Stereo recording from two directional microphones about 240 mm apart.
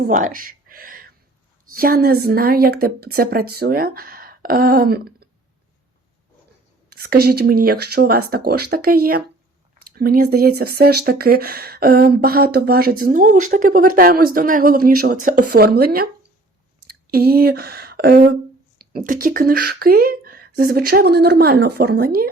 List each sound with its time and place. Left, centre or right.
0.0 s speech: right
6.9 s speech: right